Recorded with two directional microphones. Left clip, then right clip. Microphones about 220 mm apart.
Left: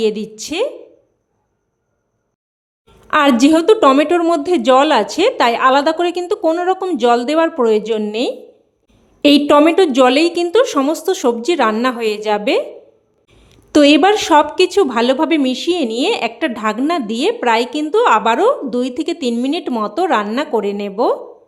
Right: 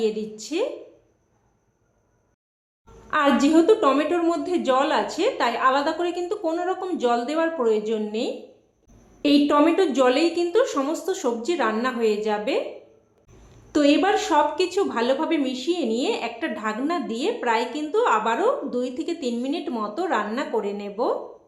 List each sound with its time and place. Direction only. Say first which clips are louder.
0.0 s speech: left 7 dB; 45° left (ahead or behind)
3.1 s speech: left 8 dB; 50° left (ahead or behind)